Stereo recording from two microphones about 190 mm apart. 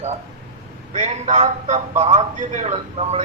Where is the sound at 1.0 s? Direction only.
35° right (ahead or behind).